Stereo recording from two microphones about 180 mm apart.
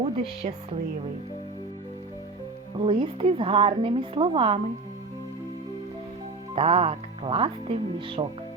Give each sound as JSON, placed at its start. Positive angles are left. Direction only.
{"t": 0.0, "sound": "speech", "side_deg": -35}
{"t": 2.7, "sound": "a woman's voice", "side_deg": -30}
{"t": 6.6, "sound": "speech", "side_deg": -35}